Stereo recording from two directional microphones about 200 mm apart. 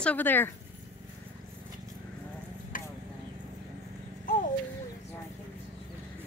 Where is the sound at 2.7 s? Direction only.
40° left (ahead or behind).